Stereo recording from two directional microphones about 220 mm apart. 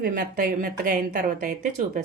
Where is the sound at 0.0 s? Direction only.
40° right (ahead or behind).